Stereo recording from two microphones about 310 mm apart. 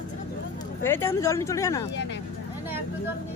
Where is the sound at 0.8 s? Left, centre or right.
Centre.